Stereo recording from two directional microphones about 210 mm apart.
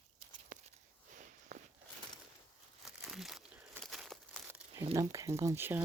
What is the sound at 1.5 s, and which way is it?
Walk, 35° right (ahead or behind).